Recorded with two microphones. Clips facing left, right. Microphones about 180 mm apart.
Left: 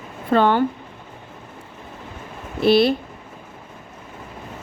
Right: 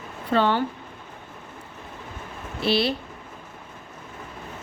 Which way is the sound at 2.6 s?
50° left (ahead or behind).